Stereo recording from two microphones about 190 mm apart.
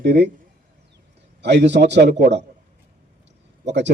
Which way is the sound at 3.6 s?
65° right (ahead or behind).